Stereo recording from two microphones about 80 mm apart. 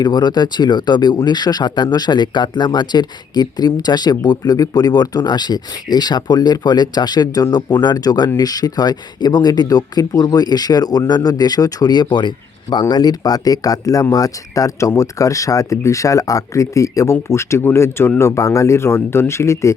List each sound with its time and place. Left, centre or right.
0.0 s speech: left